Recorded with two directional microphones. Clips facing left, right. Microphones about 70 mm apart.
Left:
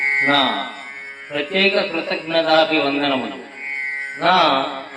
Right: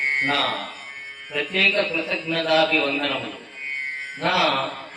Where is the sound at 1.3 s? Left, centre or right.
Left.